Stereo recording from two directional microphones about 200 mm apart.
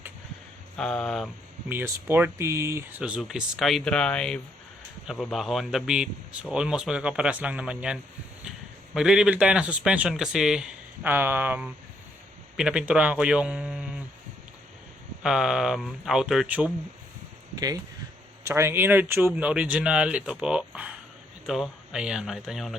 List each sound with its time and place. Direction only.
0.8 s a man's voice: 5° left (ahead or behind)
1.7 s a man's voice: 10° right (ahead or behind)
9.0 s a man's voice: 5° right (ahead or behind)
15.2 s a man's voice: 5° right (ahead or behind)
17.5 s a man's voice: 20° right (ahead or behind); by 22.7 s centre (ahead or behind)